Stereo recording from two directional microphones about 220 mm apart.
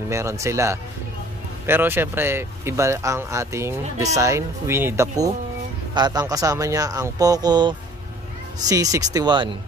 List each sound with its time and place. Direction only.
0.1 s speech: 15° right (ahead or behind)